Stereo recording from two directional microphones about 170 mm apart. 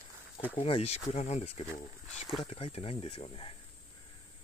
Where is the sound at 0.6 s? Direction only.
35° left (ahead or behind).